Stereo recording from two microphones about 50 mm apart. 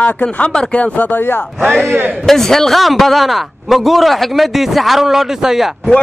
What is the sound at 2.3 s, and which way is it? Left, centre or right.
A man's voice, centre.